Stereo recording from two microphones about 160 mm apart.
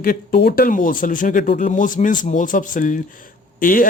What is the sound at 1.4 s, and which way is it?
Speech, 75° left (ahead or behind).